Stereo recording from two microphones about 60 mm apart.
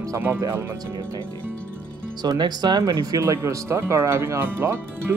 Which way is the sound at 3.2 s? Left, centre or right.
Right.